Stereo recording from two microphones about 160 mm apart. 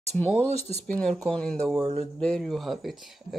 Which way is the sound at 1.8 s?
40° right (ahead or behind).